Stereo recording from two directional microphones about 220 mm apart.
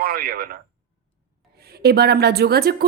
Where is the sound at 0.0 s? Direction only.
40° right (ahead or behind).